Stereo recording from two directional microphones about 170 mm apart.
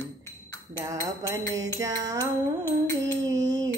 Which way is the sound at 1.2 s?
20° right (ahead or behind).